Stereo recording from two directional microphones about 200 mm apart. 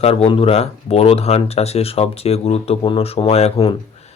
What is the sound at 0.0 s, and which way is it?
Speech, 30° left (ahead or behind).